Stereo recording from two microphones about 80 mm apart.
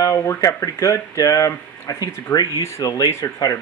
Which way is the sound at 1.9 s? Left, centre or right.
Left.